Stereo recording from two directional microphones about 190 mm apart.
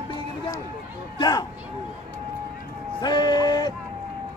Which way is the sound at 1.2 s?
20° left (ahead or behind).